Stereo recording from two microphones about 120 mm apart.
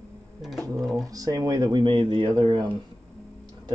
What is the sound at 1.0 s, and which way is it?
Speech, 30° right (ahead or behind).